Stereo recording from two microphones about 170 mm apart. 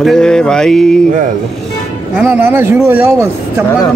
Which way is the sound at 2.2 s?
10° right (ahead or behind).